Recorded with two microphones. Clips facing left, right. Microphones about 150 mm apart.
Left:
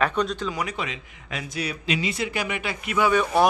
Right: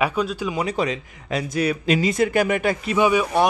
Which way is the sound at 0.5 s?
35° right (ahead or behind).